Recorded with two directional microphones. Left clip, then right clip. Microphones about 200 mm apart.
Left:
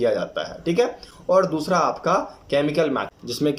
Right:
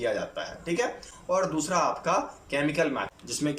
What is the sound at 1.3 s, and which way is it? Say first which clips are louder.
Speech: left 8 dB; 20° left (ahead or behind).